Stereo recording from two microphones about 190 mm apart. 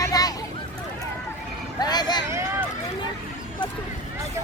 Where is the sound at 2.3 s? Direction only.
15° right (ahead or behind).